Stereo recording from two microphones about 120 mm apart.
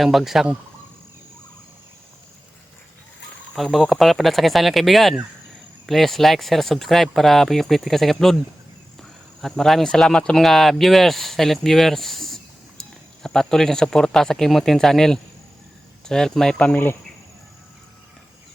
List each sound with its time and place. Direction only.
0.0 s speech: centre (ahead or behind)
3.5 s speech: centre (ahead or behind)